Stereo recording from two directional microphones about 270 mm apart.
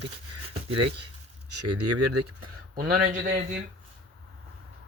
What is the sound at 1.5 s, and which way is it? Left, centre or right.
Speech, right.